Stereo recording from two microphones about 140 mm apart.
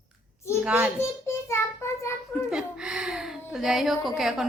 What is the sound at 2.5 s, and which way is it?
A woman's voice, 5° right (ahead or behind).